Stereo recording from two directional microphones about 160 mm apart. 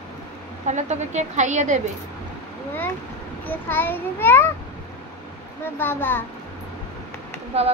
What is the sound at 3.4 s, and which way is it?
A child's voice, 10° left (ahead or behind).